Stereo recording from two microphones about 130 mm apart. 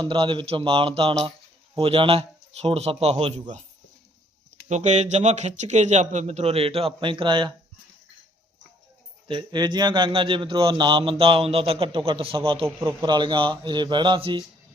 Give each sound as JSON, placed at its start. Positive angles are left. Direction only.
{"t": 0.0, "sound": "a man's voice", "side_deg": -40}
{"t": 4.7, "sound": "a man's voice", "side_deg": -60}
{"t": 9.2, "sound": "a man's voice", "side_deg": -35}
{"t": 13.0, "sound": "speech", "side_deg": -35}